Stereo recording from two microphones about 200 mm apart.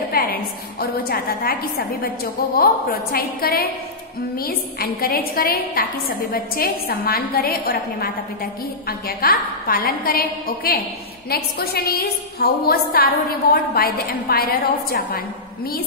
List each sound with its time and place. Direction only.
0.1 s a woman's voice: 50° left (ahead or behind)